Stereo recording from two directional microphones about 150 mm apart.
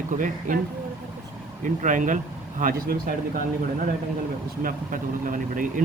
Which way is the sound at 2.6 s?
70° right (ahead or behind).